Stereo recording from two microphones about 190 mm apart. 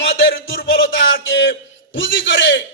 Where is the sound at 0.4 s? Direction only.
80° left.